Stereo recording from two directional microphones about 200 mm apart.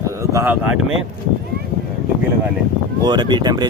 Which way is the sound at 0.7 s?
80° right.